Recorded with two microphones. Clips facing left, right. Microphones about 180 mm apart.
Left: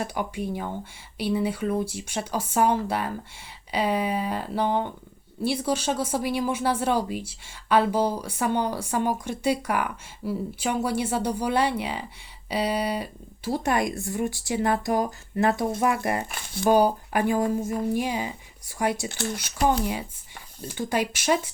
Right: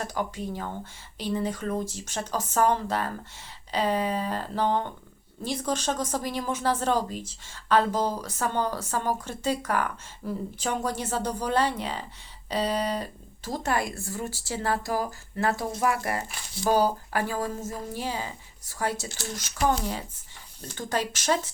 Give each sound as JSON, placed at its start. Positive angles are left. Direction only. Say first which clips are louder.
{"t": 0.0, "sound": "a woman's voice", "louder": "left 2 dB", "side_deg": 15}
{"t": 19.0, "sound": "speech", "louder": "left 7 dB", "side_deg": 60}
{"t": 19.6, "sound": "a woman's voice", "louder": "left 2 dB", "side_deg": 10}